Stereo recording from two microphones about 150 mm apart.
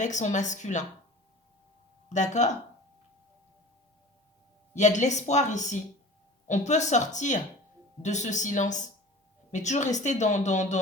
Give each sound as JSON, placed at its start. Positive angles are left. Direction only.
{"t": 0.0, "sound": "a woman's voice", "side_deg": 55}
{"t": 2.0, "sound": "a woman's voice", "side_deg": 55}
{"t": 4.7, "sound": "a woman's voice", "side_deg": 50}